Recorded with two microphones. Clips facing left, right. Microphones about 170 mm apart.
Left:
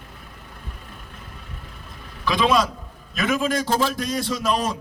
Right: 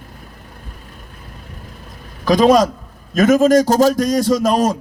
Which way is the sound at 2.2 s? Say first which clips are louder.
Right 8 dB; 40° right (ahead or behind).